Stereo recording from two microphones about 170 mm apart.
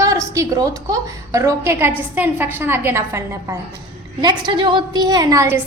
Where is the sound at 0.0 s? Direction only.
20° right (ahead or behind).